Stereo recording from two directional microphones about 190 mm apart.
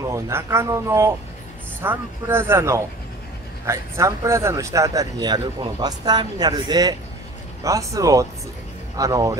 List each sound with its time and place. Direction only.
0.0 s speech: 15° right (ahead or behind)